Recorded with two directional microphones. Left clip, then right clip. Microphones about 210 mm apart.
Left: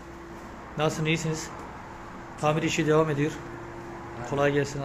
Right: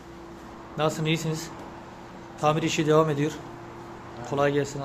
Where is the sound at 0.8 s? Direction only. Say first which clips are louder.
Right 1 dB; 5° right (ahead or behind).